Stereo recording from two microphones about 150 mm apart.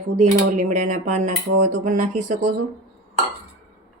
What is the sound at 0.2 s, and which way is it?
Speech, 55° right (ahead or behind).